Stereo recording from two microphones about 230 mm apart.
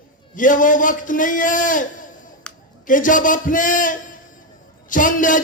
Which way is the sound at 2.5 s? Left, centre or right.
Centre.